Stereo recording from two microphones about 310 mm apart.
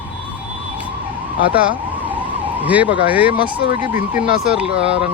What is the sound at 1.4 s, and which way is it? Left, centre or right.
Emergency vehicle, left.